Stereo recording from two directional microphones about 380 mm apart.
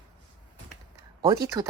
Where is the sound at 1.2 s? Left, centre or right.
Centre.